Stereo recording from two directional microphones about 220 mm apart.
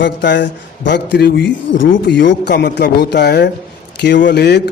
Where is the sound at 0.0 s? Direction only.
55° left (ahead or behind).